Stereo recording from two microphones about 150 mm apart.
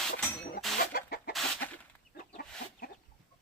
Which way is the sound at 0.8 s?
90° left.